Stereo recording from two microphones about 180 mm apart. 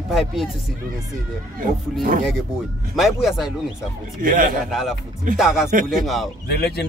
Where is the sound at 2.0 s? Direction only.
50° right (ahead or behind).